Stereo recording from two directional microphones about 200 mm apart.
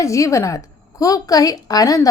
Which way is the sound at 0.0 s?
15° left (ahead or behind).